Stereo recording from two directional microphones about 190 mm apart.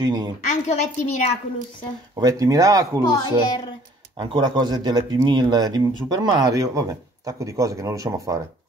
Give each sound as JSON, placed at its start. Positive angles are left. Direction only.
{"t": 0.0, "sound": "a woman's voice", "side_deg": -20}
{"t": 0.5, "sound": "a woman's voice", "side_deg": 40}
{"t": 2.1, "sound": "speech", "side_deg": -20}
{"t": 3.1, "sound": "a child's voice", "side_deg": 20}
{"t": 4.2, "sound": "speech", "side_deg": -25}